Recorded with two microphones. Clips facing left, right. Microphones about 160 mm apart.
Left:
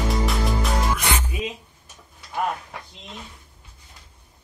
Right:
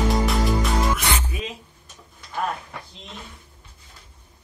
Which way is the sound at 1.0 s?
10° left (ahead or behind).